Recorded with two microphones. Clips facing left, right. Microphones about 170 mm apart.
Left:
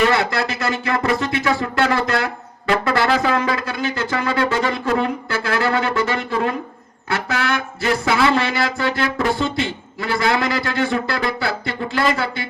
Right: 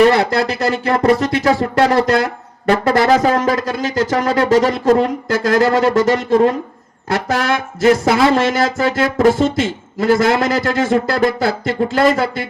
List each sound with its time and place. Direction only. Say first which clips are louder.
0.0 s music: right 6 dB; 35° right (ahead or behind)
7.1 s speech: right 5 dB; 40° right (ahead or behind)